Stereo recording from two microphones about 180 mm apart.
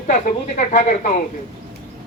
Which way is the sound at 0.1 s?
45° left (ahead or behind).